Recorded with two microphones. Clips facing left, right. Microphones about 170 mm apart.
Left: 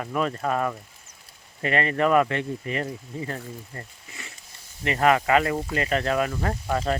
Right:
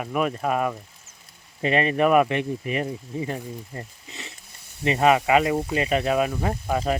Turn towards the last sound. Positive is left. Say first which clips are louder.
# right 1 dB
turn(degrees=-10)  # may be behind; listen again after turning